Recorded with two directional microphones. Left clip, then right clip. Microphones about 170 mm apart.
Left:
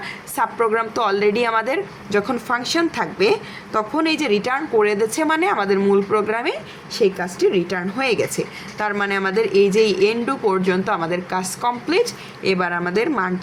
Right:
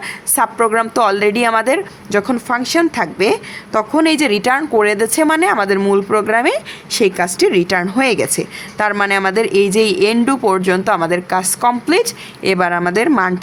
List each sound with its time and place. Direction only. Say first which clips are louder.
0.3 s a woman's voice: right 5 dB; 30° right (ahead or behind)